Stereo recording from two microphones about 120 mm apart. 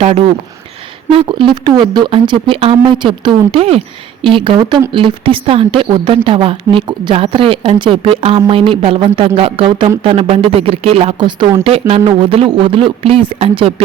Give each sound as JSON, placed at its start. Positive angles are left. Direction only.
{"t": 0.0, "sound": "speech", "side_deg": -55}
{"t": 1.3, "sound": "speech", "side_deg": -45}
{"t": 3.0, "sound": "speech", "side_deg": -40}